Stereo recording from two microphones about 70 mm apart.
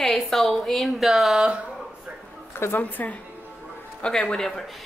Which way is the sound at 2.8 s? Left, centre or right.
Left.